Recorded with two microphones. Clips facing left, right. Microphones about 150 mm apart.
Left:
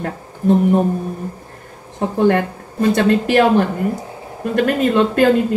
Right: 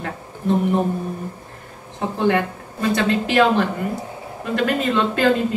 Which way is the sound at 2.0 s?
45° left (ahead or behind).